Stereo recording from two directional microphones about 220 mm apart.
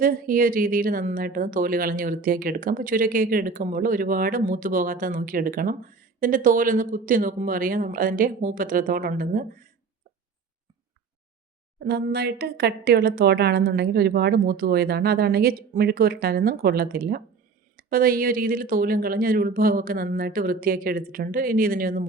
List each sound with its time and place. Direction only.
0.0 s speech: 40° right (ahead or behind)
11.8 s speech: 45° right (ahead or behind)